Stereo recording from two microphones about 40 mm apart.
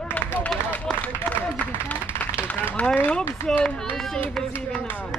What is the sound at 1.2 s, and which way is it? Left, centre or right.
Speech, left.